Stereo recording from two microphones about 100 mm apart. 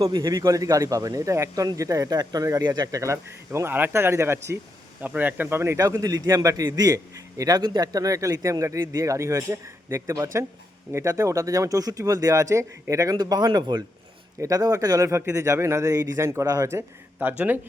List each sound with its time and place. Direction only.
0.0 s a man's voice: 40° right (ahead or behind)
14.3 s a man's voice: 35° right (ahead or behind)
17.2 s speech: 15° right (ahead or behind)